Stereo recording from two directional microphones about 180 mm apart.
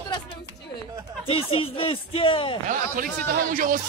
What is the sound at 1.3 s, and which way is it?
Speech, 30° left (ahead or behind).